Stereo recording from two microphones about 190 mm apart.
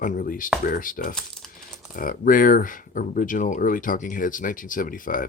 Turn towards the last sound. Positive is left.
turn(degrees=45)  # may be behind; listen again after turning